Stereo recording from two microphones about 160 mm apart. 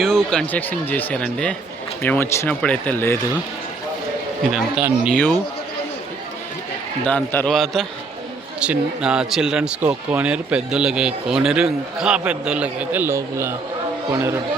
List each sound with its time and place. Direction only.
0.0 s speech: 5° left (ahead or behind)
4.8 s a man's voice: 10° right (ahead or behind)
7.0 s a man's voice: 10° left (ahead or behind); by 14.3 s 20° right (ahead or behind)